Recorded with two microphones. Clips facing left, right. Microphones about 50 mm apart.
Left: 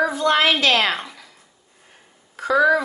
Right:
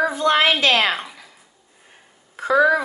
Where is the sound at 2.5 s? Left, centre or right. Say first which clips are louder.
Even; centre.